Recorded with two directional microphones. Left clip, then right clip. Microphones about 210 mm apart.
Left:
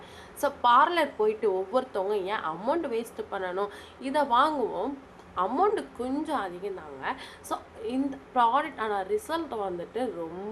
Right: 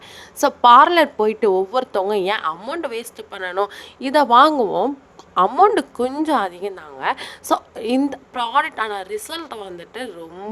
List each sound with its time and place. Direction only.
0.3 s a woman's voice: 45° right (ahead or behind)